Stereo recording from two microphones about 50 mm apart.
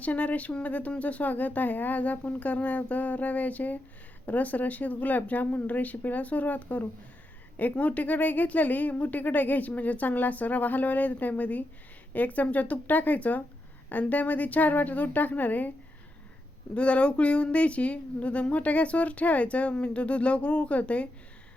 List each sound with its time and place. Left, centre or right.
0.0 s speech: left
16.7 s speech: left